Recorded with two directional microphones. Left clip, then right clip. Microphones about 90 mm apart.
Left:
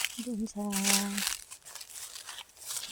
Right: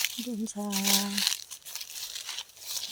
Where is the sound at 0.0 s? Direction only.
40° left (ahead or behind).